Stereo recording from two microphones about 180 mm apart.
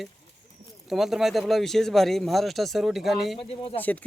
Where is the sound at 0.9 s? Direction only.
Centre (ahead or behind).